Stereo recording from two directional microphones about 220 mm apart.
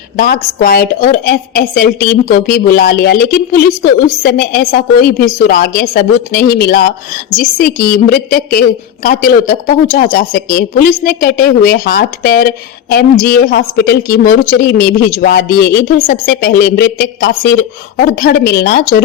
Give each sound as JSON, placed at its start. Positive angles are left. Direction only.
{"t": 0.2, "sound": "a woman's voice", "side_deg": 40}